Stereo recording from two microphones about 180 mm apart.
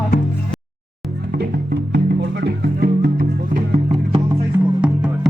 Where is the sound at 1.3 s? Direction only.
60° right (ahead or behind).